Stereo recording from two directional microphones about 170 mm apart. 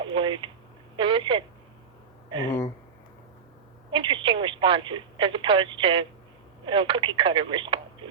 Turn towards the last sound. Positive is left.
turn(degrees=-30)  # may be behind; listen again after turning